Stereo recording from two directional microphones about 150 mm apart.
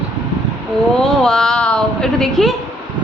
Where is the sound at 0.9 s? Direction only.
5° left (ahead or behind).